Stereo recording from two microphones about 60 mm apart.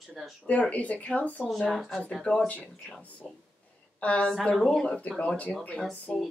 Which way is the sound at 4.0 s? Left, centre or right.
Left.